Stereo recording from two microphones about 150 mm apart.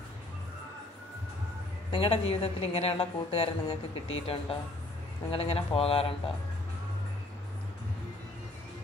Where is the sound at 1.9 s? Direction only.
40° left (ahead or behind).